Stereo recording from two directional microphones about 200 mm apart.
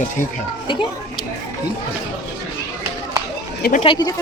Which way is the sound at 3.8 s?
20° left (ahead or behind).